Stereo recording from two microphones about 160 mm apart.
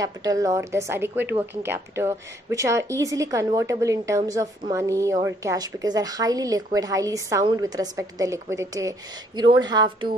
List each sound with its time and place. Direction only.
0.0 s a woman's voice: 20° right (ahead or behind)